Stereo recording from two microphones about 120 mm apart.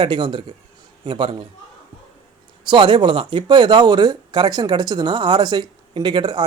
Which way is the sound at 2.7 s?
45° right (ahead or behind).